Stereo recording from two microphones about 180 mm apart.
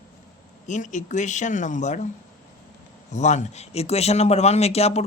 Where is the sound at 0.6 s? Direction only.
40° left (ahead or behind).